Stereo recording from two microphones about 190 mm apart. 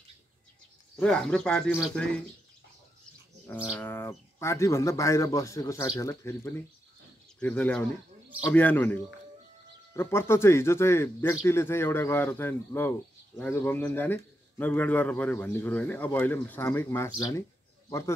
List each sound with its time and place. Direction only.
0.9 s speech: 5° left (ahead or behind)
3.7 s speech: 10° left (ahead or behind)